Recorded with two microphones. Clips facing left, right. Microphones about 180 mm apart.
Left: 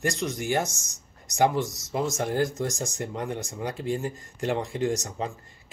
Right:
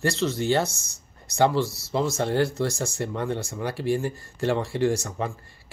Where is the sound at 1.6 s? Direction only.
15° left (ahead or behind).